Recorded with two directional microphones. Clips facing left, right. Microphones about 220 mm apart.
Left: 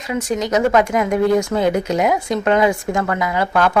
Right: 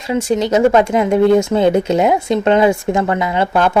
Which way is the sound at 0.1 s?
30° right (ahead or behind).